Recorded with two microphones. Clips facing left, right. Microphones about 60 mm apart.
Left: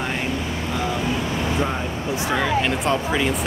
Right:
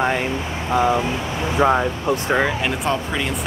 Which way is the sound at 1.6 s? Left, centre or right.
Right.